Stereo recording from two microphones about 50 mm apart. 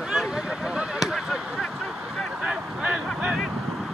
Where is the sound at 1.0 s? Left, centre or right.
Centre.